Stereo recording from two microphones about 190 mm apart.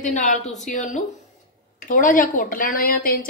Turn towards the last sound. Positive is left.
turn(degrees=50)  # may be behind; listen again after turning